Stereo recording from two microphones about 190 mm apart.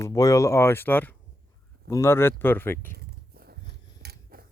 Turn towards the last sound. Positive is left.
turn(degrees=-55)  # may be behind; listen again after turning